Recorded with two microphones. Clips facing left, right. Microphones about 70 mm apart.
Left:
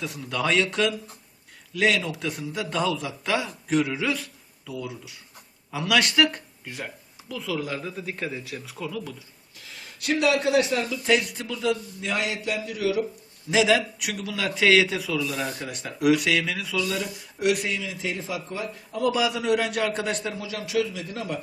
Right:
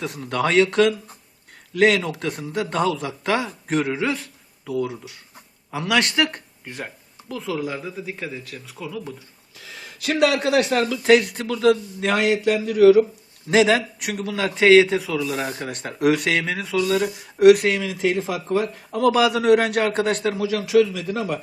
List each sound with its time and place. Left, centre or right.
0.0 s a man's voice: right
5.8 s speech: right
7.6 s a man's voice: centre
10.0 s speech: right
10.9 s a man's voice: right
11.9 s a sound: right
13.5 s a man's voice: right
18.0 s a man's voice: right
20.9 s speech: right